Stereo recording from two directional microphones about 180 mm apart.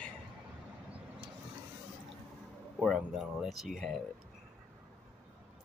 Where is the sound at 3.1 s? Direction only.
Centre (ahead or behind).